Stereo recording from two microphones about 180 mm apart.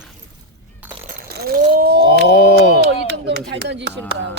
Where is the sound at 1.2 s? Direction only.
60° right (ahead or behind).